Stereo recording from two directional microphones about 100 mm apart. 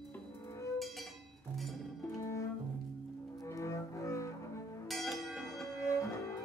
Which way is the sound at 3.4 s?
30° left (ahead or behind).